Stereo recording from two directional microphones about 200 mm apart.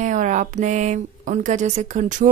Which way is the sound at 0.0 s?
40° right (ahead or behind).